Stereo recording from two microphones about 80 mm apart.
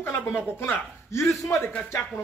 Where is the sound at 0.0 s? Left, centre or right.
Left.